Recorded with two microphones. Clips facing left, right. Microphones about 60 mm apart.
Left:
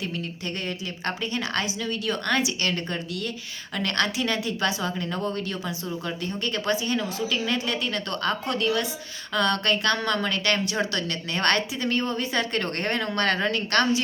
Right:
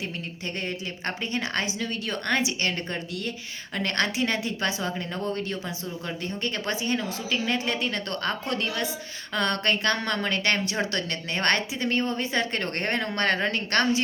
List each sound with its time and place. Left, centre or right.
0.0 s speech: right